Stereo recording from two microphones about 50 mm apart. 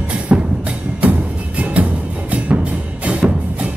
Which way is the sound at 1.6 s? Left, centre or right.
Right.